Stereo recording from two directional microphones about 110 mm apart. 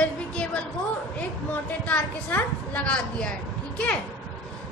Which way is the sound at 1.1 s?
15° left (ahead or behind).